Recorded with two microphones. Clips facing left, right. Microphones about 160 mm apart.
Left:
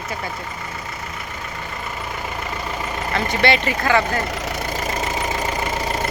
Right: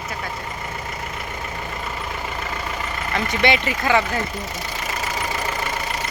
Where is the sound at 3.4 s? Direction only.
15° right (ahead or behind).